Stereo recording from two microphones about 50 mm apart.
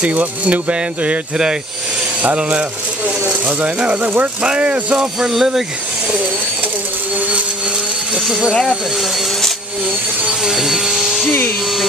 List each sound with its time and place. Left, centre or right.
0.0 s speech: right
5.3 s speech: centre
8.3 s speech: centre
10.4 s speech: centre